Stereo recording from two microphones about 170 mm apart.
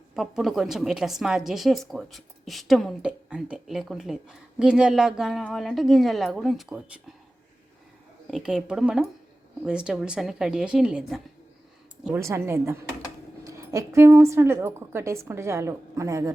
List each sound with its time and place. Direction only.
0.2 s a woman's voice: centre (ahead or behind)
8.3 s a woman's voice: centre (ahead or behind)
12.0 s a woman's voice: 15° right (ahead or behind)